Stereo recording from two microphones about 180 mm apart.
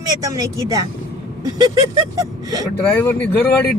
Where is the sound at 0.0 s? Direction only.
20° right (ahead or behind).